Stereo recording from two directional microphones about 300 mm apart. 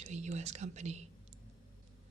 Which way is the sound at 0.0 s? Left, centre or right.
Right.